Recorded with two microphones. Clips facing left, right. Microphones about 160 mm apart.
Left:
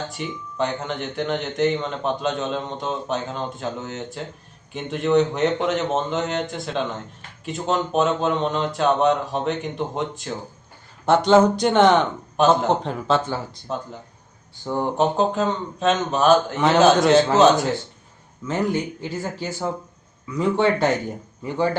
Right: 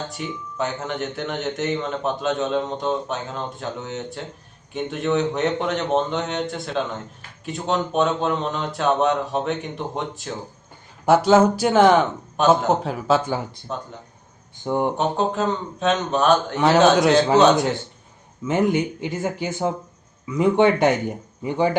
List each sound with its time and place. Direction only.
0.1 s speech: centre (ahead or behind)
14.6 s speech: 20° right (ahead or behind)
14.9 s speech: centre (ahead or behind)
18.4 s speech: 20° right (ahead or behind)